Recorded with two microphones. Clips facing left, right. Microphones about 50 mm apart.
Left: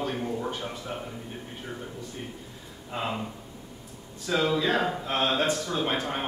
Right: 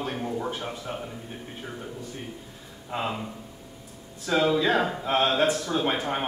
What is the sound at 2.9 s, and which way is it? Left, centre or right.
Speech, centre.